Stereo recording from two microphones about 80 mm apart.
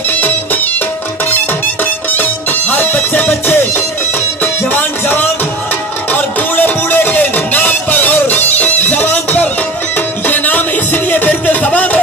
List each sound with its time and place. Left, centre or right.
2.1 s music: left